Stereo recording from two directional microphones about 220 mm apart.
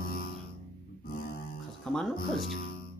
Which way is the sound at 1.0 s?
40° left (ahead or behind).